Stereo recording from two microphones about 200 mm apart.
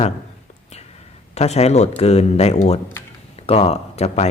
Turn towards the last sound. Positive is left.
turn(degrees=30)  # may be behind; listen again after turning